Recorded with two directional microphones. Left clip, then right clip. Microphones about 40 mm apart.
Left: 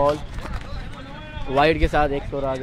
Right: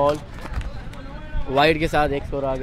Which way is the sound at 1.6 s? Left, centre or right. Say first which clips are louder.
Even; right.